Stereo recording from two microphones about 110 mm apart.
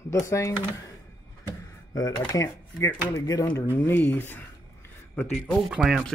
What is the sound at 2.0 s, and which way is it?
Speech, 30° left (ahead or behind).